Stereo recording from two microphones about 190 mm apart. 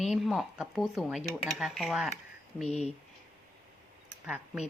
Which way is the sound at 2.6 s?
35° left (ahead or behind).